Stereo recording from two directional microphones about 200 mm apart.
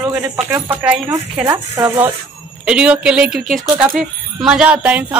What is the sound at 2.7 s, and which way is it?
Speech, 5° right (ahead or behind).